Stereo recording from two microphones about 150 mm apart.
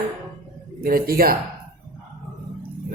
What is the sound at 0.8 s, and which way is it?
Speech, 75° right (ahead or behind).